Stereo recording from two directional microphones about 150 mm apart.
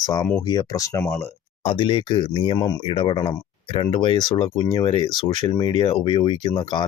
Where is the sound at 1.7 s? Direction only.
35° left (ahead or behind).